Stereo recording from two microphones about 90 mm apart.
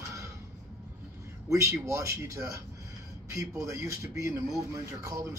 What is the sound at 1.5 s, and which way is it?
Speech, 35° right (ahead or behind).